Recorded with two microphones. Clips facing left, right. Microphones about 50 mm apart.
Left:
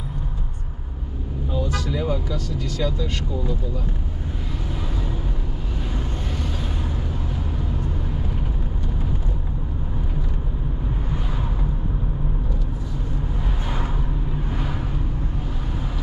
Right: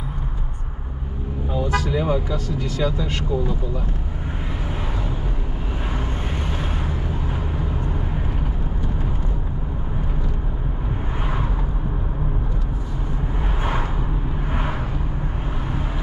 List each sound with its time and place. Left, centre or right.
1.5 s speech: right
7.5 s vehicle: right
14.5 s vehicle: right